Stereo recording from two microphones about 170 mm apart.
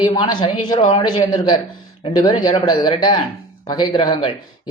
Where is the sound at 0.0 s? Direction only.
25° left (ahead or behind).